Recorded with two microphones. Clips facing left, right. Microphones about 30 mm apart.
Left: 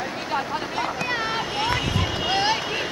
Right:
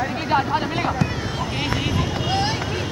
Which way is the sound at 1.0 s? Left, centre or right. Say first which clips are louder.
Left 2 dB; left.